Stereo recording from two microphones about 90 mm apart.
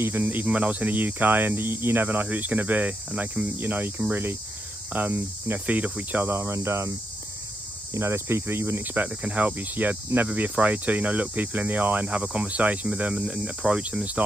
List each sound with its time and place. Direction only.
0.0 s speech: 25° right (ahead or behind)
7.9 s cricket: 30° right (ahead or behind)